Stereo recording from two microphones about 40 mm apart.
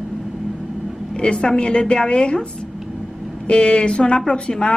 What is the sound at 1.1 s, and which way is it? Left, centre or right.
A woman's voice, left.